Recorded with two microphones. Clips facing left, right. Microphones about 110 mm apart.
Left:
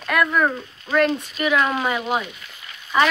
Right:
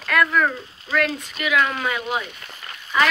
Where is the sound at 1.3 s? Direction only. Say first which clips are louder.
Right 2 dB; 30° left (ahead or behind).